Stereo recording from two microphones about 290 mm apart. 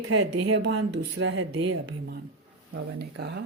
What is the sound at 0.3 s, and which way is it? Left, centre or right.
Speech, right.